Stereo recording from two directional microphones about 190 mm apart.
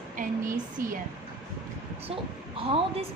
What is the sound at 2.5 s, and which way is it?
Speech, 30° right (ahead or behind).